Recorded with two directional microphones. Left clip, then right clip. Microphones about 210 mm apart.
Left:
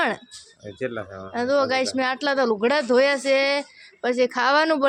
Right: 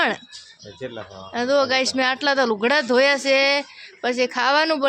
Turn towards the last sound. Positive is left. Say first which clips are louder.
# even
turn(degrees=10)  # may be behind; listen again after turning